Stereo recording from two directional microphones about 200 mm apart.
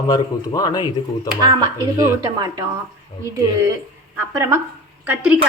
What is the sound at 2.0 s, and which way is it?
Speech, 20° right (ahead or behind).